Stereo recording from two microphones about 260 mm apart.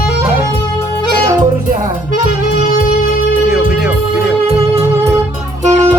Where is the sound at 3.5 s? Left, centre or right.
Centre.